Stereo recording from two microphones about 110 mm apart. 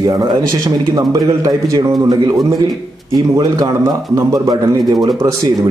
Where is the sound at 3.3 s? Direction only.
30° right (ahead or behind).